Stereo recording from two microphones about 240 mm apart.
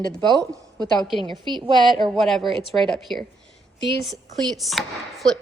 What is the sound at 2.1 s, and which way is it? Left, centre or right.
A woman's voice, centre.